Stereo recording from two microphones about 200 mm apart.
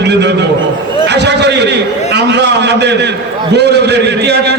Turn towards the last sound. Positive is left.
turn(degrees=-55)  # may be behind; listen again after turning